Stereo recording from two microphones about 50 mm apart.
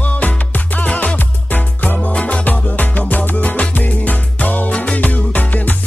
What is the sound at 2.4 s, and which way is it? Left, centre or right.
Music, left.